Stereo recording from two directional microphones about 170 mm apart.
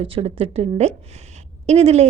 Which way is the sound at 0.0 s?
35° right (ahead or behind).